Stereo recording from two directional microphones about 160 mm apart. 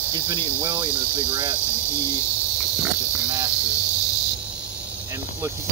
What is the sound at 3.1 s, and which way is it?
Cricket, 10° right (ahead or behind).